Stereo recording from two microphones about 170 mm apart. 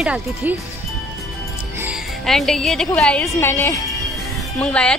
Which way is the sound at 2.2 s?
Centre (ahead or behind).